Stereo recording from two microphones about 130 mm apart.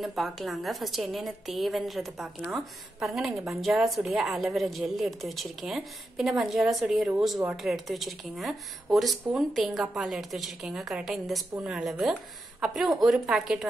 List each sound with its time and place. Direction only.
0.0 s a woman's voice: centre (ahead or behind)